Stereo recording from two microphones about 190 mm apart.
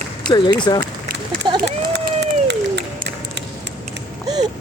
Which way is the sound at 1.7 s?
65° right (ahead or behind).